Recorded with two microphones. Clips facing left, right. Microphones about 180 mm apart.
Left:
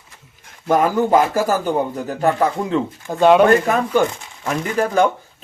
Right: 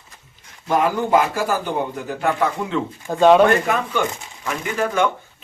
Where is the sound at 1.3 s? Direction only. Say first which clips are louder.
Left 4 dB; 40° left (ahead or behind).